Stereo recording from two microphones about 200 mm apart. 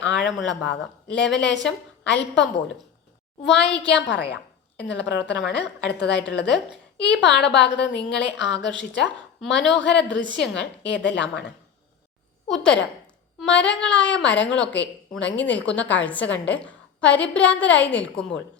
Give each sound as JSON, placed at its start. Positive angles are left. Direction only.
{"t": 0.0, "sound": "a sound", "side_deg": 65}
{"t": 0.3, "sound": "a woman's voice", "side_deg": 0}
{"t": 0.6, "sound": "a woman's voice", "side_deg": 60}
{"t": 12.5, "sound": "a woman's voice", "side_deg": 5}
{"t": 15.7, "sound": "a woman's voice", "side_deg": 65}
{"t": 16.0, "sound": "a woman's voice", "side_deg": 5}